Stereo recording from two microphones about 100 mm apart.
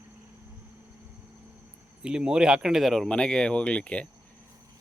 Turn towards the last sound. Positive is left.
turn(degrees=10)  # may be behind; listen again after turning